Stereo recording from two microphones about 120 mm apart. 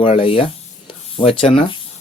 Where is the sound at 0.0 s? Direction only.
50° left (ahead or behind).